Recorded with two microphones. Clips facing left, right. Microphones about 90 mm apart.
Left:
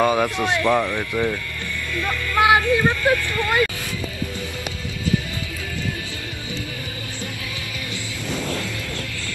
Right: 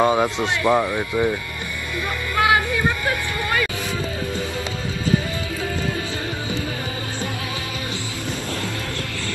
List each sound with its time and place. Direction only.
0.0 s speech: 20° right (ahead or behind)
2.3 s music: 20° right (ahead or behind)